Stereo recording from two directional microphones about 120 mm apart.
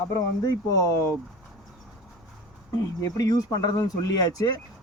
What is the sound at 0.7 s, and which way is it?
Speech, 30° left (ahead or behind).